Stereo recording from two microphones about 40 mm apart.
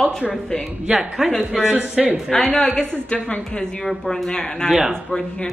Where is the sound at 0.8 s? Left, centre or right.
Centre.